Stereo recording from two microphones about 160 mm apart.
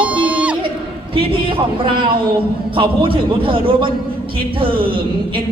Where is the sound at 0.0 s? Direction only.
10° right (ahead or behind).